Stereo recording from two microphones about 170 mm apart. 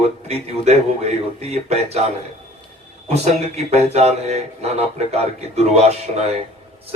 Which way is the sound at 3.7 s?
40° right (ahead or behind).